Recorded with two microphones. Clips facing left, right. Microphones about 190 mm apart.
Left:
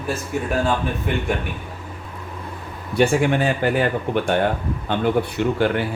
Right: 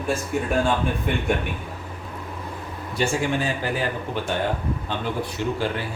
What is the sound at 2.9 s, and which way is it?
Speech, 60° left (ahead or behind).